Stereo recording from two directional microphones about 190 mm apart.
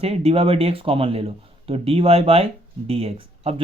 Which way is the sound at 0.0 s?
30° right (ahead or behind).